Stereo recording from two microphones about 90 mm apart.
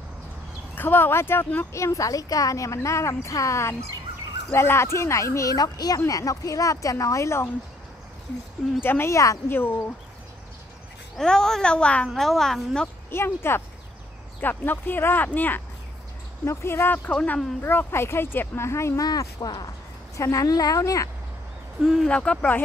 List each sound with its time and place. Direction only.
0.7 s speech: 25° left (ahead or behind)
8.8 s speech: 30° left (ahead or behind)
9.5 s speech: 25° left (ahead or behind)
11.1 s a woman's voice: 5° left (ahead or behind)
12.1 s a woman's voice: centre (ahead or behind)
13.1 s speech: 25° left (ahead or behind)
19.0 s speech: 45° left (ahead or behind)
21.8 s a woman's voice: centre (ahead or behind)
22.1 s a woman's voice: 15° left (ahead or behind)